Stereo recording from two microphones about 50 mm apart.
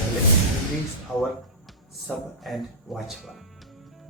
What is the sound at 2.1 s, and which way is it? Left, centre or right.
Speech, centre.